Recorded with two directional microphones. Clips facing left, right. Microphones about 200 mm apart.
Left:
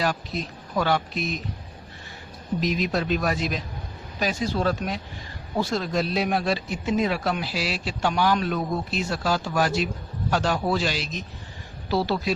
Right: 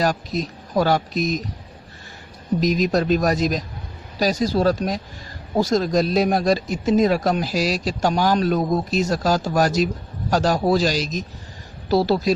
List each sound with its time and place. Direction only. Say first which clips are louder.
0.0 s speech: right 5 dB; 40° right (ahead or behind)
2.6 s speech: right 6 dB; 40° right (ahead or behind)